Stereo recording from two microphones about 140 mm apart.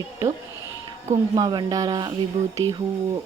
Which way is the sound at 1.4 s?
30° right (ahead or behind).